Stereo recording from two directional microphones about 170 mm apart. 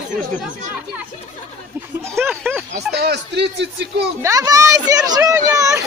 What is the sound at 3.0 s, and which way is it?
Speech, 75° right (ahead or behind).